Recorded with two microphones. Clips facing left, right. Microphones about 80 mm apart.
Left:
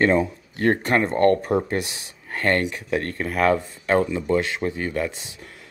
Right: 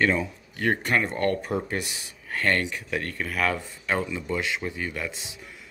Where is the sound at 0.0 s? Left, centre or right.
Left.